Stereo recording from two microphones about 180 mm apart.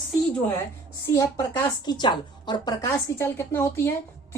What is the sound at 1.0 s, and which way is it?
A woman's voice, 15° left (ahead or behind).